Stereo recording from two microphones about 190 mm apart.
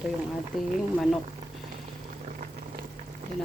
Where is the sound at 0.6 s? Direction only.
Centre (ahead or behind).